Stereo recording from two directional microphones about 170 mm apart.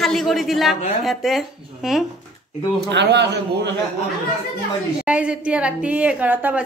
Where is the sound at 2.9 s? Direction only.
90° right.